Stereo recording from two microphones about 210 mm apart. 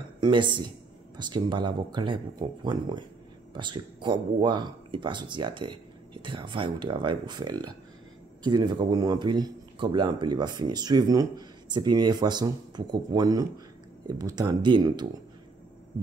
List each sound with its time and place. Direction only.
0.2 s speech: 20° right (ahead or behind)